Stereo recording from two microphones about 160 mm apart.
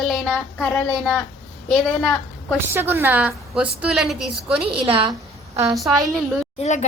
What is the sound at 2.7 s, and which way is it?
A woman's voice, 15° right (ahead or behind).